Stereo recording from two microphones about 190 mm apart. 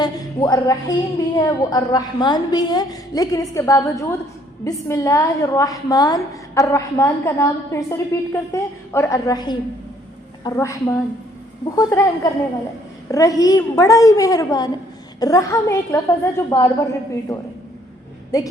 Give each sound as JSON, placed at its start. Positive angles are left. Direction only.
{"t": 0.0, "sound": "a woman's voice", "side_deg": 20}
{"t": 18.3, "sound": "a woman's voice", "side_deg": 20}